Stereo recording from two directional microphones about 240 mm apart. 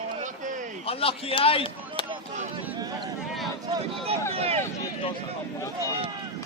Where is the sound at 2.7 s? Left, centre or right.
Centre.